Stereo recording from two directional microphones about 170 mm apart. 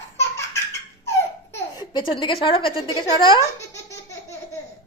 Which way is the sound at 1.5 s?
25° left (ahead or behind).